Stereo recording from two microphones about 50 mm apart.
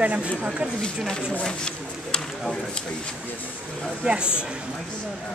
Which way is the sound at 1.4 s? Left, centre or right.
Centre.